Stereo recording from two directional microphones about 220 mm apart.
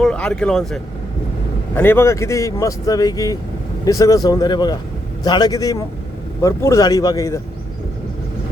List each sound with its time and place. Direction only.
0.0 s speech: 5° left (ahead or behind)